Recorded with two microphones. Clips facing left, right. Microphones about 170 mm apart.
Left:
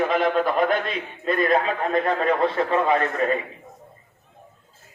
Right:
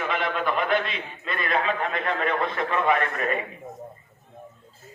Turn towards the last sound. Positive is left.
turn(degrees=30)  # may be behind; listen again after turning